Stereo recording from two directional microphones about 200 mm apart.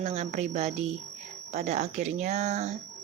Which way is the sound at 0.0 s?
35° right (ahead or behind).